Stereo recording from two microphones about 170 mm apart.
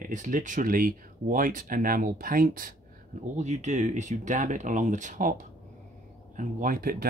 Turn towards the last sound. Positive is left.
turn(degrees=-60)  # may be behind; listen again after turning